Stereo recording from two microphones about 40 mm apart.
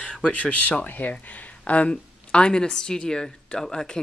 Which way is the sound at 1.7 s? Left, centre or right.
Left.